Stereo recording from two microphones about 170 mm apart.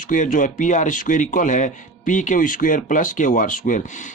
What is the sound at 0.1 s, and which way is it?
Speech, 50° left (ahead or behind).